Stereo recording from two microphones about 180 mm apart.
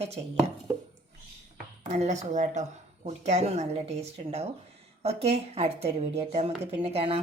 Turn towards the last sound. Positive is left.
turn(degrees=-30)  # may be behind; listen again after turning